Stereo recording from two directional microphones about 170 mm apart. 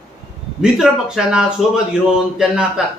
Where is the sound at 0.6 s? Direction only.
5° right (ahead or behind).